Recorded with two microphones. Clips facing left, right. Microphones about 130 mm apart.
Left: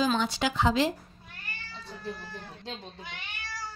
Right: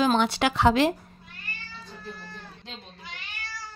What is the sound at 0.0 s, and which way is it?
Speech, 65° right (ahead or behind).